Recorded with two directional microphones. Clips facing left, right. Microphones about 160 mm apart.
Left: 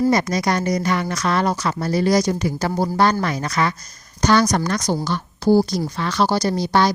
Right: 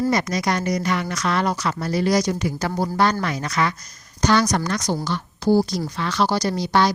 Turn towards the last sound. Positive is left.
turn(degrees=40)  # may be behind; listen again after turning